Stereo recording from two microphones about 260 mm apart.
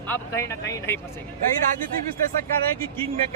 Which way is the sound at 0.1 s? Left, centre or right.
Centre.